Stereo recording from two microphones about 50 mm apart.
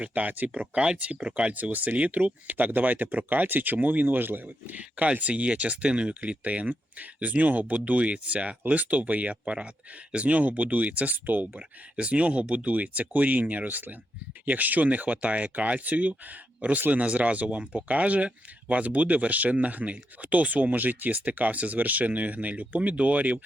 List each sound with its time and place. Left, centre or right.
0.0 s speech: right
11.9 s speech: right